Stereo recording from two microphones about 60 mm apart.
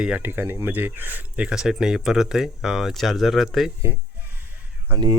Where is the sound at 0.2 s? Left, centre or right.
Right.